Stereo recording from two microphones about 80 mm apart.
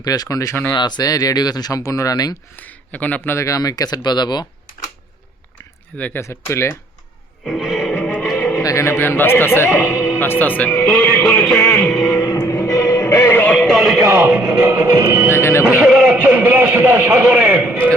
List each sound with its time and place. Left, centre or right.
0.0 s speech: left
0.7 s speech: left
2.6 s speech: left
3.2 s speech: left
6.1 s speech: left
7.4 s music: centre
8.4 s music: left
8.6 s a man's voice: left
10.7 s music: centre
12.3 s music: left
13.5 s a man's voice: centre
15.3 s speech: left
15.7 s a man's voice: centre